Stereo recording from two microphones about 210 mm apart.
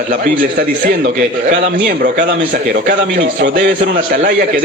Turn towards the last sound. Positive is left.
turn(degrees=-40)  # may be behind; listen again after turning